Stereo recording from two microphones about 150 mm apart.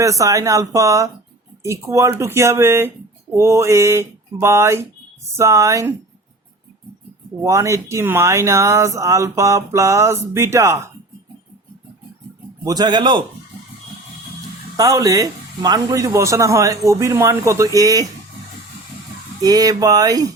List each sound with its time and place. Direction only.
0.0 s a man's voice: 20° right (ahead or behind)
7.4 s a man's voice: 20° right (ahead or behind)
12.6 s a man's voice: 25° right (ahead or behind)
14.8 s a man's voice: 20° right (ahead or behind)
19.4 s a man's voice: 25° right (ahead or behind)